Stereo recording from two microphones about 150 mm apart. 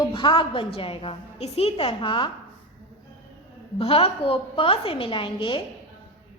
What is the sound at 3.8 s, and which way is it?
A woman's voice, 40° left (ahead or behind).